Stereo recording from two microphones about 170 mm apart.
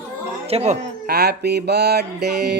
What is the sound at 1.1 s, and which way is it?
Music, 75° right (ahead or behind).